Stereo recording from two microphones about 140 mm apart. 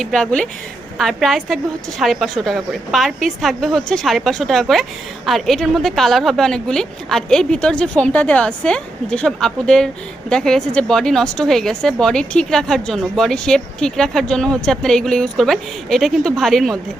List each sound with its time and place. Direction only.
0.0 s a woman's voice: 5° left (ahead or behind)